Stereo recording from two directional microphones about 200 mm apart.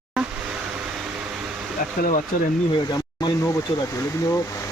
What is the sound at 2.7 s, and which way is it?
Speech, 20° left (ahead or behind).